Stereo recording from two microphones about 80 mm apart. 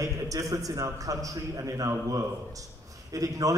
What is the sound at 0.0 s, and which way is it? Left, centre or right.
A man's voice, right.